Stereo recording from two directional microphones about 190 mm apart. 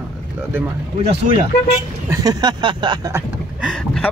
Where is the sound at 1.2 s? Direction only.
40° right (ahead or behind).